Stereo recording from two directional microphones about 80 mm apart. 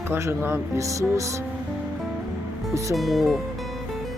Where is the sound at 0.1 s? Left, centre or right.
Right.